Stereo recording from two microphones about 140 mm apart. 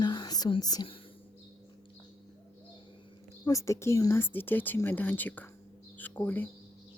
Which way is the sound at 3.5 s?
20° left (ahead or behind).